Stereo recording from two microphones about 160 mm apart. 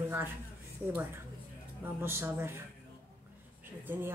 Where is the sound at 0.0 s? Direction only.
15° right (ahead or behind).